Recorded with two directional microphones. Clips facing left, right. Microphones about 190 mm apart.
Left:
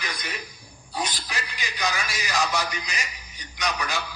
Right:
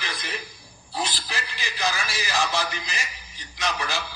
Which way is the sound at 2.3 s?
30° right (ahead or behind).